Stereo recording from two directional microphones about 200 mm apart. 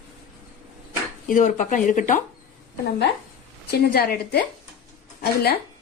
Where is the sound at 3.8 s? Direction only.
50° left (ahead or behind).